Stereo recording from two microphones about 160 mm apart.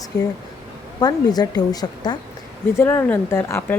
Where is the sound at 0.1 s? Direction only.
90° left.